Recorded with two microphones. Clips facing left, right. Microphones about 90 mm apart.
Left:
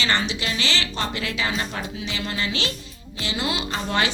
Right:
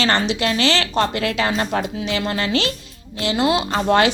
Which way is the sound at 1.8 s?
60° right (ahead or behind).